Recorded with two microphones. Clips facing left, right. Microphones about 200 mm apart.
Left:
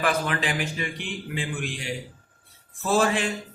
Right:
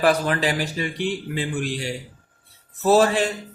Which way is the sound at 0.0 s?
40° right (ahead or behind).